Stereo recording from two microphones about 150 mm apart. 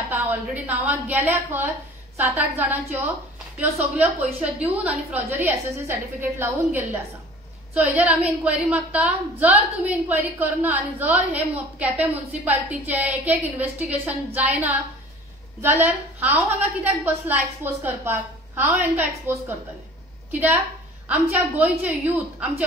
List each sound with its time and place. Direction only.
0.1 s a woman's voice: 10° right (ahead or behind)